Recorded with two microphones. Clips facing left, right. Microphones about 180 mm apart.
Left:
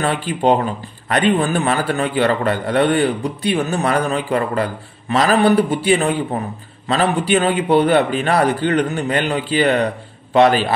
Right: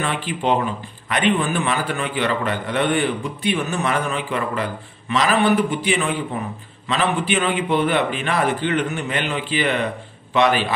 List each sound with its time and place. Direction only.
0.0 s a man's voice: 40° left (ahead or behind)